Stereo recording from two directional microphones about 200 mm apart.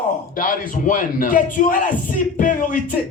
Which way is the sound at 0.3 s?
45° left (ahead or behind).